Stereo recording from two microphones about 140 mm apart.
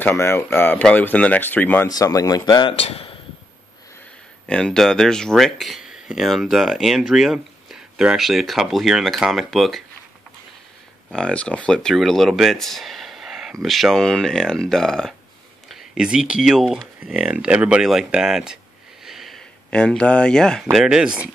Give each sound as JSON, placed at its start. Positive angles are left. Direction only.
{"t": 0.0, "sound": "speech", "side_deg": 15}
{"t": 1.9, "sound": "a man's voice", "side_deg": 25}
{"t": 2.8, "sound": "speech", "side_deg": 45}
{"t": 4.5, "sound": "speech", "side_deg": 5}
{"t": 11.1, "sound": "speech", "side_deg": 5}
{"t": 19.0, "sound": "a sound", "side_deg": 0}
{"t": 20.7, "sound": "speech", "side_deg": -5}